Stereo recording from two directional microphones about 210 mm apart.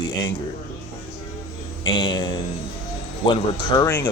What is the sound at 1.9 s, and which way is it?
Speech, 20° left (ahead or behind).